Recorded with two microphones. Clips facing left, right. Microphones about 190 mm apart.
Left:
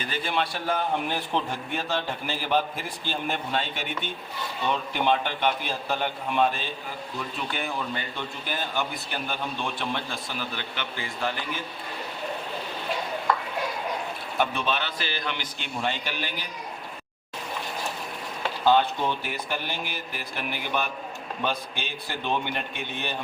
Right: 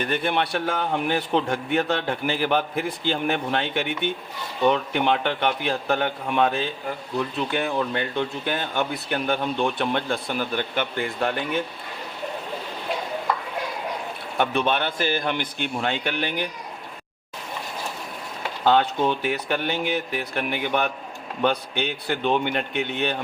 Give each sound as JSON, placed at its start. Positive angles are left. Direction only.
{"t": 0.0, "sound": "a man's voice", "side_deg": -60}
{"t": 7.5, "sound": "a man's voice", "side_deg": -65}
{"t": 14.3, "sound": "a man's voice", "side_deg": -60}
{"t": 18.6, "sound": "a man's voice", "side_deg": -60}